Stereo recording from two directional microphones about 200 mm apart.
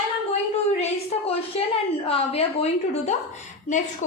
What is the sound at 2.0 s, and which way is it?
A woman's voice, 30° left (ahead or behind).